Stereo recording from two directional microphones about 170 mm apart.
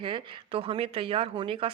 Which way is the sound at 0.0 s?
30° right (ahead or behind).